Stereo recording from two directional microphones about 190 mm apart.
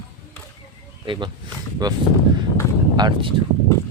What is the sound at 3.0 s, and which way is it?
Speech, 25° right (ahead or behind).